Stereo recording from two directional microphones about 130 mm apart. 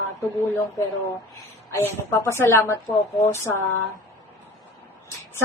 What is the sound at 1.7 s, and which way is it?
Speech, 20° left (ahead or behind).